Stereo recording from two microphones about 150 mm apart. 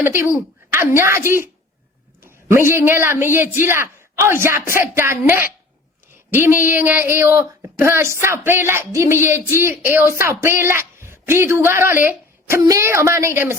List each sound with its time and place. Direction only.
0.0 s a man's voice: 15° right (ahead or behind)